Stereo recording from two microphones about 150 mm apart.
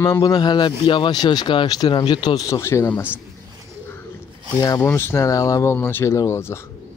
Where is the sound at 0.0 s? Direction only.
25° left (ahead or behind).